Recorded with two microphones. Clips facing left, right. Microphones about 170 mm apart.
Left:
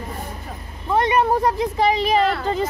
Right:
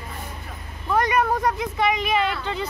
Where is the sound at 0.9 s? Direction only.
25° left (ahead or behind).